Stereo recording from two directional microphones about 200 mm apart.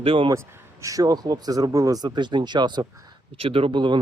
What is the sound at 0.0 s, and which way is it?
Speech, 25° right (ahead or behind).